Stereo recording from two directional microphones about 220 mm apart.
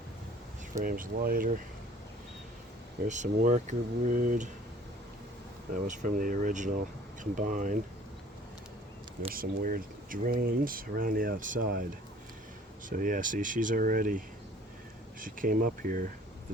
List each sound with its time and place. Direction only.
0.8 s speech: 40° right (ahead or behind)
3.1 s speech: 35° right (ahead or behind)
5.9 s speech: 35° right (ahead or behind)
9.3 s speech: 40° right (ahead or behind)
12.9 s speech: 40° right (ahead or behind)